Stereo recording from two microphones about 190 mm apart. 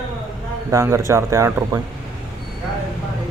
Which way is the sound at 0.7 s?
15° right (ahead or behind).